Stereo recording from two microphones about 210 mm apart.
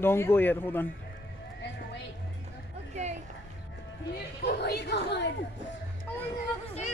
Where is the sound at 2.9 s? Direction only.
35° right (ahead or behind).